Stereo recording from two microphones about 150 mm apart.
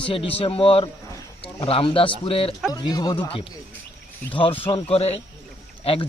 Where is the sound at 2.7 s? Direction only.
25° left (ahead or behind).